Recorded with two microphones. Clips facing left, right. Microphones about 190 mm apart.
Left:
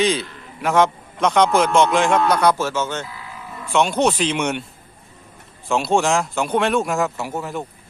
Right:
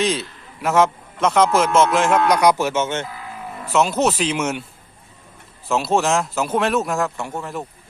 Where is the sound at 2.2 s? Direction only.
15° right (ahead or behind).